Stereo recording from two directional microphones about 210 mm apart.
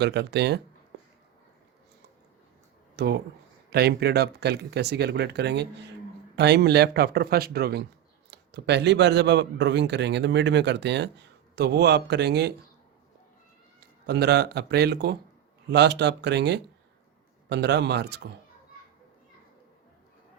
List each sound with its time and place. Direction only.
0.0 s speech: 55° right (ahead or behind)
2.9 s a sound: 50° right (ahead or behind)
3.7 s speech: 50° right (ahead or behind)
14.1 s speech: 50° right (ahead or behind)